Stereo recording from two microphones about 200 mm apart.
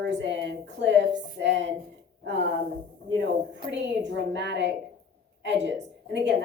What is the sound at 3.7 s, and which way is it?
A woman's voice, 60° right (ahead or behind).